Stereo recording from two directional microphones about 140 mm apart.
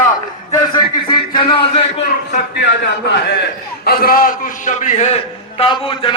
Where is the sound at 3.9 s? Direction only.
90° left; by 5.2 s 55° left (ahead or behind).